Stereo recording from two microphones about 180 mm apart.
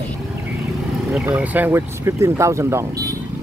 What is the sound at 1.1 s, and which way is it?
Speech, 5° right (ahead or behind).